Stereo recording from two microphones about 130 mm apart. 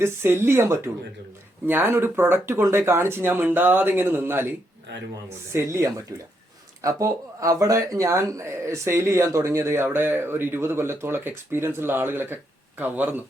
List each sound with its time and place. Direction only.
0.0 s speech: 15° right (ahead or behind)